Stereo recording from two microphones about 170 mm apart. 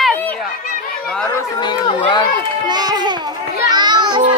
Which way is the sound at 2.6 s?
25° right (ahead or behind).